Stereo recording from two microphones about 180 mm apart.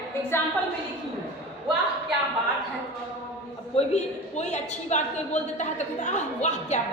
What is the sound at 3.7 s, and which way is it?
A woman's voice, 40° left (ahead or behind).